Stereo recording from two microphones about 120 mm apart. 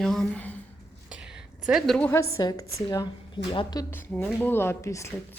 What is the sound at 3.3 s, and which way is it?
Speech, 40° left (ahead or behind).